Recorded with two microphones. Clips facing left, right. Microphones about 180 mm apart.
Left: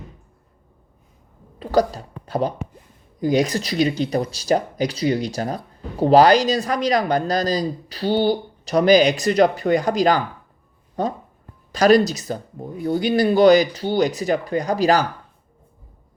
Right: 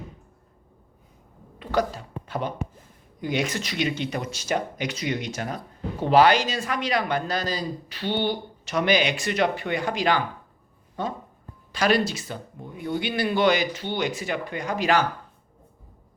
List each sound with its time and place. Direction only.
1.5 s a man's voice: 35° left (ahead or behind)
2.2 s a sound: 35° left (ahead or behind)
3.2 s a man's voice: 35° left (ahead or behind)